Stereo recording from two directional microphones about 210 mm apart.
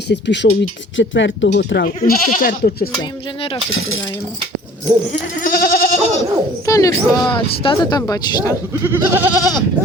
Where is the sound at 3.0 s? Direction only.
25° left (ahead or behind).